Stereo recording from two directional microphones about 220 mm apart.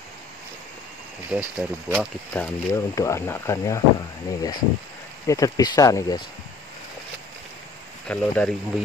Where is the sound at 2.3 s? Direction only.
10° left (ahead or behind).